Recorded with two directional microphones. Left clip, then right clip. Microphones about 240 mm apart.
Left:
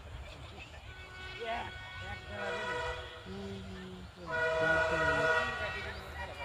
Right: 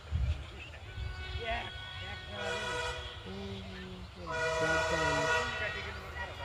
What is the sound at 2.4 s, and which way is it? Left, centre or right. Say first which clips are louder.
Music: right 1 dB; right.